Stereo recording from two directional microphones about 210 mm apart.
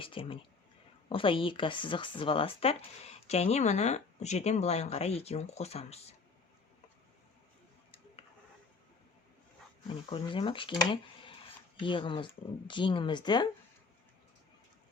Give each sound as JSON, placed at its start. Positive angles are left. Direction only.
{"t": 0.0, "sound": "speech", "side_deg": 25}
{"t": 9.9, "sound": "speech", "side_deg": 25}